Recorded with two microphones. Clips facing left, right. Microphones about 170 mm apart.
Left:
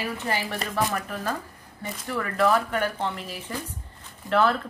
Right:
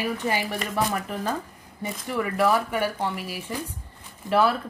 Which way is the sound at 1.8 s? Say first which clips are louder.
Right 2 dB; 15° right (ahead or behind).